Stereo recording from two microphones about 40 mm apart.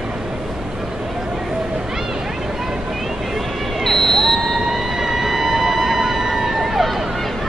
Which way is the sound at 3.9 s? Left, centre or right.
Centre.